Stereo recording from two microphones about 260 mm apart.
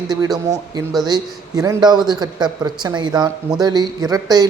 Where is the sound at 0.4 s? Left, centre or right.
Centre.